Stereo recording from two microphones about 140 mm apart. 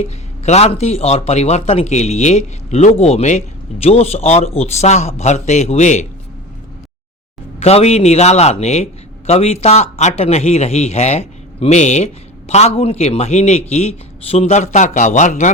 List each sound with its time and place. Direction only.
0.4 s speech: 50° left (ahead or behind)
7.6 s speech: 50° left (ahead or behind)